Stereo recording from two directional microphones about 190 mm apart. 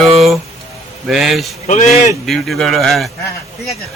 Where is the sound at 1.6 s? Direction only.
40° left (ahead or behind).